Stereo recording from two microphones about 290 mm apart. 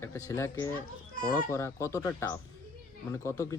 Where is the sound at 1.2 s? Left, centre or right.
Left.